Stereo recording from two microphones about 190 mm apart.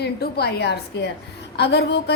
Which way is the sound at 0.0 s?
60° left (ahead or behind).